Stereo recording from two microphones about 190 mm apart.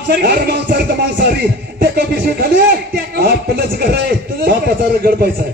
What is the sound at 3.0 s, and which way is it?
A man's voice, 55° right (ahead or behind).